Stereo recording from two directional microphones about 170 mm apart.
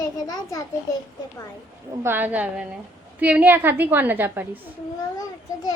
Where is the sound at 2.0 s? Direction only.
10° right (ahead or behind).